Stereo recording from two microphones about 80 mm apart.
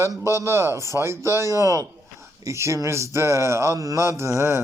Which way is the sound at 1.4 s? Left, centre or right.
Left.